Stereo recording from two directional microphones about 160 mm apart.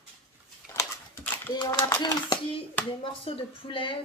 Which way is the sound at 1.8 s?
25° left (ahead or behind).